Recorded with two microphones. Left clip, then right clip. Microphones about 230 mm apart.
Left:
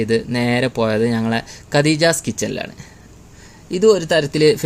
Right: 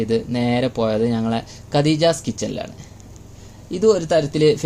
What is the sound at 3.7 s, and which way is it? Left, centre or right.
Speech, left.